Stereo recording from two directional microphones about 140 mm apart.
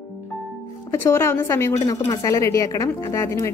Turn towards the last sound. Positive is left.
turn(degrees=20)  # may be behind; listen again after turning